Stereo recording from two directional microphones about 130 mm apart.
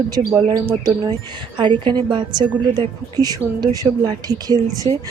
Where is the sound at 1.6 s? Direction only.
35° right (ahead or behind).